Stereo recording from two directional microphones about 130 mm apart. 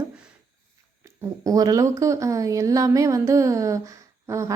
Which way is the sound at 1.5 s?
30° right (ahead or behind).